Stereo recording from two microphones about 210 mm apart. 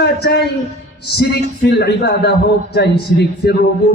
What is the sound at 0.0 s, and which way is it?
A man's voice, 50° left (ahead or behind).